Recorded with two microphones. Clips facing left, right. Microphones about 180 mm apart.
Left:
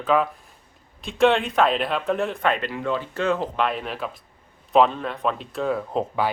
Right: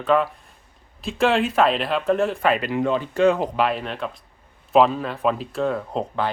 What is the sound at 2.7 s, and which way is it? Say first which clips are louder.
Speech: right 5 dB; 20° right (ahead or behind).